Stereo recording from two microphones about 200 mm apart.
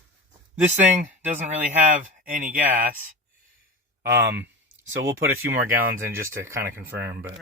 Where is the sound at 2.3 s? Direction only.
40° right (ahead or behind).